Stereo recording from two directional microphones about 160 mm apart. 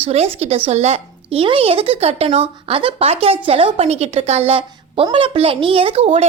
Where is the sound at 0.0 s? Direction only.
40° right (ahead or behind).